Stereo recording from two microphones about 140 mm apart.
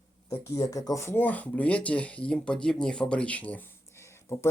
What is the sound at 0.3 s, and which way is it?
Speech, 20° left (ahead or behind).